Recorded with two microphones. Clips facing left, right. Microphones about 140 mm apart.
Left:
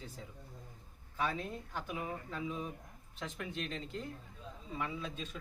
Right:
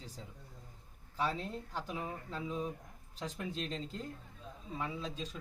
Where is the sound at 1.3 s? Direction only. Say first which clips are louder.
Even; 30° right (ahead or behind).